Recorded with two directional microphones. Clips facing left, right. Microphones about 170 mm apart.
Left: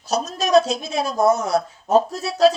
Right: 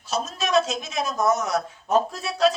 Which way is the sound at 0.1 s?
40° left (ahead or behind).